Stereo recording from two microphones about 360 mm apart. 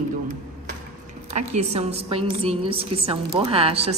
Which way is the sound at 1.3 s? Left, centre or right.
Centre.